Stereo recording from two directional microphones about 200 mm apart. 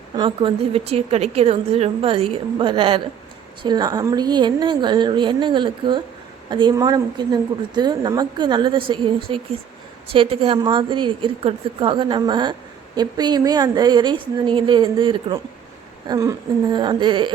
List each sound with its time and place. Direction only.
0.2 s a woman's voice: 25° right (ahead or behind)